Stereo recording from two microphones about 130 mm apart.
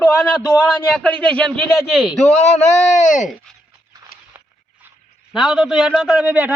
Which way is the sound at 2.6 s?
70° left (ahead or behind).